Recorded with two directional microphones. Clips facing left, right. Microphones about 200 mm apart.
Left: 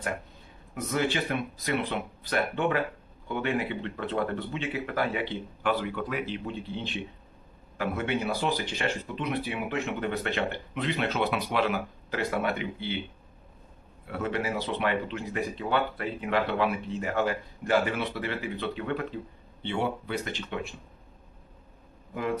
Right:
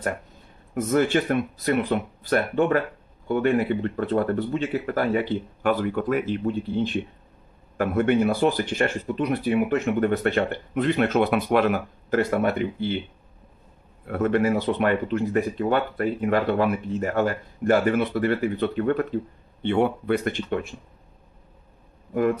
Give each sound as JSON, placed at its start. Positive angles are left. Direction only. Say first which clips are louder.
{"t": 0.7, "sound": "speech", "louder": "right 8 dB", "side_deg": -50}
{"t": 14.0, "sound": "speech", "louder": "right 9 dB", "side_deg": -50}